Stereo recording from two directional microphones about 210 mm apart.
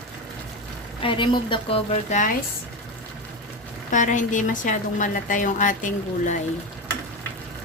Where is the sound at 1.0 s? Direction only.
25° left (ahead or behind).